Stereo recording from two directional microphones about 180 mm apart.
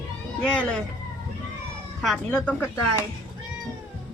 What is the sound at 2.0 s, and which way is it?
Speech, 5° left (ahead or behind).